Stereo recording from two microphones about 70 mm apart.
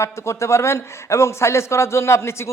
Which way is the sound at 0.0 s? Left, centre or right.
Left.